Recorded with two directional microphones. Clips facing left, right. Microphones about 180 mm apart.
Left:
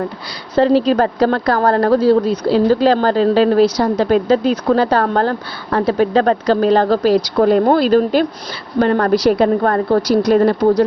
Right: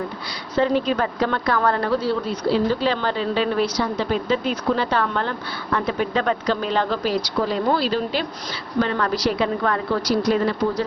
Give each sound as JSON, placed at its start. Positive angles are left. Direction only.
{"t": 0.5, "sound": "a woman's voice", "side_deg": 35}
{"t": 9.1, "sound": "a woman's voice", "side_deg": 60}